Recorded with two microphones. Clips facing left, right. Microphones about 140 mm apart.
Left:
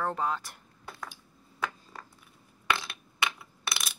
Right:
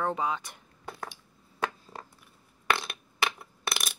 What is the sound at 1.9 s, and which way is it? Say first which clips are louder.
Cat: right 3 dB; 30° right (ahead or behind).